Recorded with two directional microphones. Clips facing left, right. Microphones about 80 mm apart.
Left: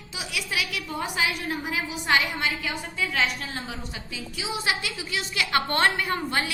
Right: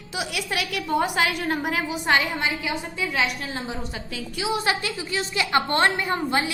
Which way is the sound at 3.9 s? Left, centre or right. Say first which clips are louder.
Right 4 dB; right.